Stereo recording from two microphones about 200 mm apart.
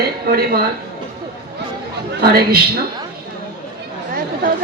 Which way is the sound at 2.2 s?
50° right (ahead or behind).